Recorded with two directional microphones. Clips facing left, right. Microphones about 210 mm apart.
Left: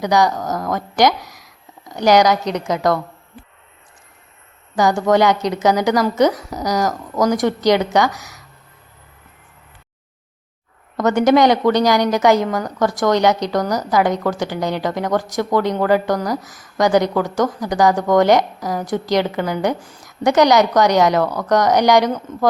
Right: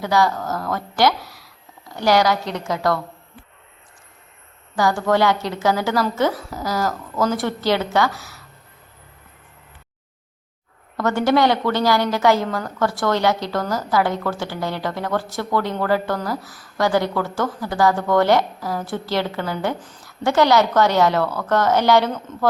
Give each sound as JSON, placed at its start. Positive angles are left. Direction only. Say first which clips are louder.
{"t": 0.0, "sound": "speech", "louder": "left 3 dB", "side_deg": 15}
{"t": 4.8, "sound": "speech", "louder": "left 3 dB", "side_deg": 20}
{"t": 10.9, "sound": "speech", "louder": "left 4 dB", "side_deg": 20}